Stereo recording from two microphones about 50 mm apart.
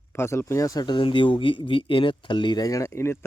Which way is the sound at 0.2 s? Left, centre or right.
Left.